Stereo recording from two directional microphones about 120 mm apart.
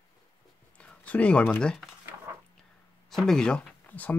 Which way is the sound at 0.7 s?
10° left (ahead or behind).